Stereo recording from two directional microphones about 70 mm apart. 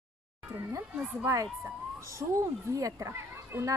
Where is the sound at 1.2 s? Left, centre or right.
Right.